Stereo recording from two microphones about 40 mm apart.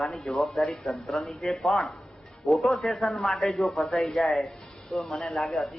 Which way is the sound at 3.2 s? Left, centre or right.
Centre.